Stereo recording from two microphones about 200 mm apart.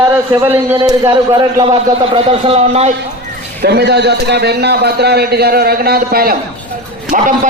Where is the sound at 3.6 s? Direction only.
55° right (ahead or behind).